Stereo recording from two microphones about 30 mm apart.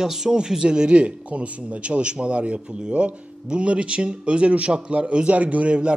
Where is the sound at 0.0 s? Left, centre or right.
Centre; by 5.8 s right.